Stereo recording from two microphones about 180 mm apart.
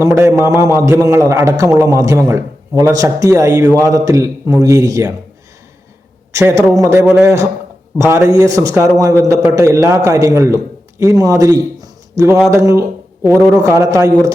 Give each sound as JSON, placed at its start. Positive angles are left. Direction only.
{"t": 0.0, "sound": "a man's voice", "side_deg": -15}
{"t": 6.3, "sound": "a man's voice", "side_deg": -15}